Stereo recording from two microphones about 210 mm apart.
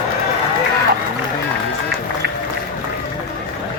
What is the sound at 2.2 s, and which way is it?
Run, 50° right (ahead or behind).